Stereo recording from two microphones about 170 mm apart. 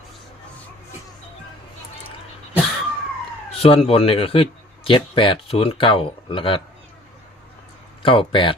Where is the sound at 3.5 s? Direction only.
35° left (ahead or behind).